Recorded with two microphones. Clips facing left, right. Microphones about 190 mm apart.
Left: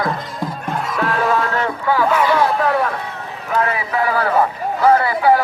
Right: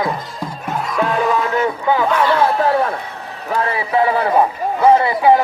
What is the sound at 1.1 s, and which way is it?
Speech, 15° right (ahead or behind).